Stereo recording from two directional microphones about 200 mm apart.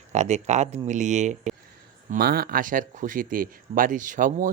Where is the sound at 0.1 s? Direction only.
35° right (ahead or behind).